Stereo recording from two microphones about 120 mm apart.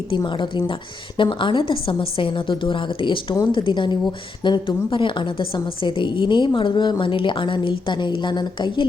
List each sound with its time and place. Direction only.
0.3 s a woman's voice: 45° left (ahead or behind)